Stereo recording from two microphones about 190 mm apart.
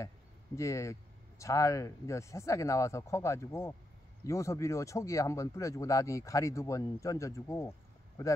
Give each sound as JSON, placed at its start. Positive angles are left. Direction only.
{"t": 0.6, "sound": "speech", "side_deg": 15}